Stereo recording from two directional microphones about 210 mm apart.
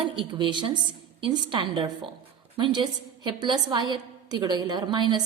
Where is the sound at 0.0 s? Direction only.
25° right (ahead or behind).